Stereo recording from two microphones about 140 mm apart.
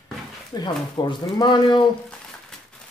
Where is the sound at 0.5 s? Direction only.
30° left (ahead or behind).